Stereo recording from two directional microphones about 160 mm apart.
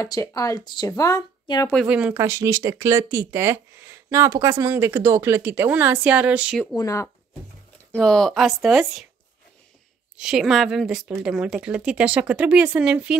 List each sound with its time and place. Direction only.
0.0 s speech: 20° left (ahead or behind)
1.9 s speech: 10° right (ahead or behind)
2.2 s speech: 20° right (ahead or behind)
6.8 s speech: 20° left (ahead or behind)
7.9 s a woman's voice: 5° left (ahead or behind)
10.1 s a woman's voice: 5° right (ahead or behind)